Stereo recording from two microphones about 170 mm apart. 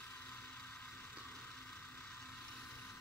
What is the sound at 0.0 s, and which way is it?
Vehicle, 10° left (ahead or behind).